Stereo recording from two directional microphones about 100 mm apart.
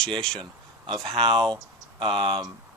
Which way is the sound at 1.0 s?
70° right (ahead or behind).